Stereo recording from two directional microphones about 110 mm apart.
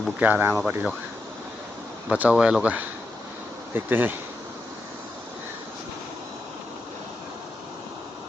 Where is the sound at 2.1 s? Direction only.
15° right (ahead or behind).